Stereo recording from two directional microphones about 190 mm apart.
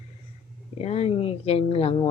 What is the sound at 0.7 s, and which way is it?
Speech, 35° left (ahead or behind).